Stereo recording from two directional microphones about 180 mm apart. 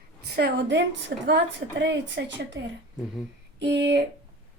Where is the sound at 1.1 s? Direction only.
65° right (ahead or behind).